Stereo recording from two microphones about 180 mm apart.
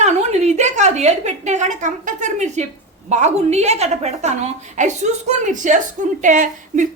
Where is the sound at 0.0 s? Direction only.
40° right (ahead or behind).